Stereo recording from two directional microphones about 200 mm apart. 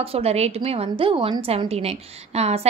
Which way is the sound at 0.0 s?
30° right (ahead or behind).